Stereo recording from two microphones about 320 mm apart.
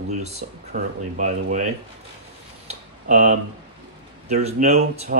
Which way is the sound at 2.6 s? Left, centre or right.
Right.